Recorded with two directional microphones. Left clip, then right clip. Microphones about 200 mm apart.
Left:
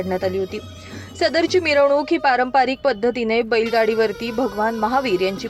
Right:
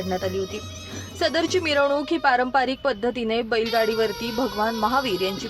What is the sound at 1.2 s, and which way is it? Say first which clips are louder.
Speech: left 4 dB; 10° left (ahead or behind).